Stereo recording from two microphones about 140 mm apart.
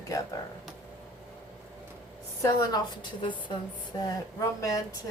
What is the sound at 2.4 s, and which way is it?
Speech, 30° left (ahead or behind).